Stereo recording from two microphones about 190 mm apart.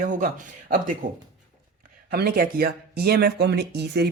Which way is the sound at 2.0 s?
55° right (ahead or behind).